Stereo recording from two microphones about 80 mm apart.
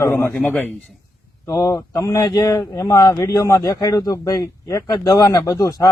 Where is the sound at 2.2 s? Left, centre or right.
Left.